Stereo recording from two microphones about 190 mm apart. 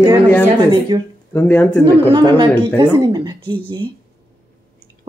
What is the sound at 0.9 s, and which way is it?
Speech, 25° right (ahead or behind).